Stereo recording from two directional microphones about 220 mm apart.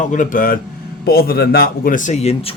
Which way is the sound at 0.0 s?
35° left (ahead or behind).